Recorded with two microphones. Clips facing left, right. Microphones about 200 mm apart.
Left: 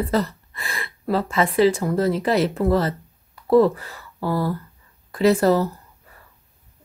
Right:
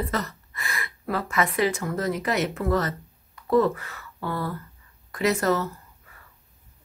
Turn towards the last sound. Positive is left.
turn(degrees=30)  # may be behind; listen again after turning